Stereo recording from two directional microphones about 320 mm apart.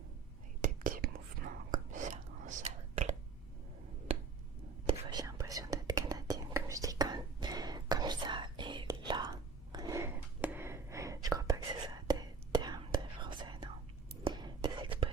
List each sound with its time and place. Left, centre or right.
0.6 s whispering: right
4.9 s whispering: centre